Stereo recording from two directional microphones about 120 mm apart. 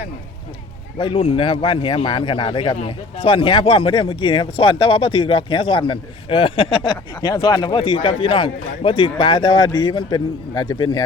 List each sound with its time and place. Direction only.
0.9 s a man's voice: 40° left (ahead or behind)